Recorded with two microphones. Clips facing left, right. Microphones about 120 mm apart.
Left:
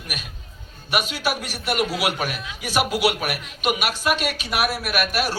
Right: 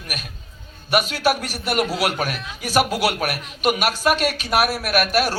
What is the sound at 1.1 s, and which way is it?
A man's voice, 45° right (ahead or behind).